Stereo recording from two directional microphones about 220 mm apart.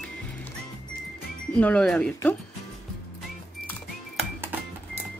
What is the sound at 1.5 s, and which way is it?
Speech, 5° left (ahead or behind).